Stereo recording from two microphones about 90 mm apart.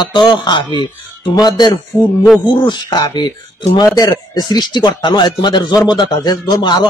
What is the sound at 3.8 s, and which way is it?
A man's voice, 45° left (ahead or behind).